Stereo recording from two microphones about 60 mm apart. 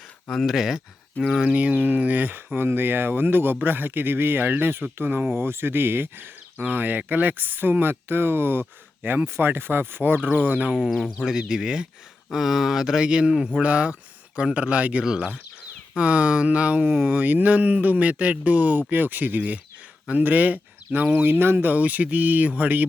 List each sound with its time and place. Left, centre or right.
0.4 s speech: centre
1.5 s speech: right
10.7 s speech: centre